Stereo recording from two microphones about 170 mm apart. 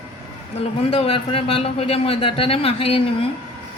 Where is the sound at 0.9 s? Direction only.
35° left (ahead or behind).